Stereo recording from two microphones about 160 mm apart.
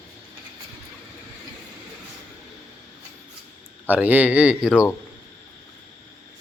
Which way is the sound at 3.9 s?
10° right (ahead or behind).